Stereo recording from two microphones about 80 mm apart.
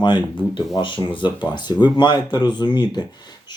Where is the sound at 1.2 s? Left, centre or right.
Left.